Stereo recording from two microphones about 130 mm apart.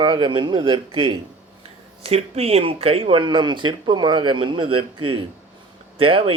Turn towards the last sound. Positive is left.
turn(degrees=-45)  # may be behind; listen again after turning